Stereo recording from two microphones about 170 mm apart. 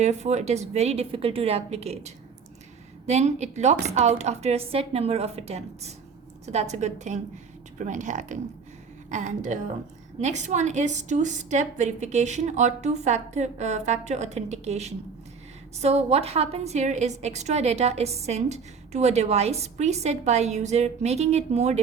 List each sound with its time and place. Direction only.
0.0 s a woman's voice: 40° right (ahead or behind)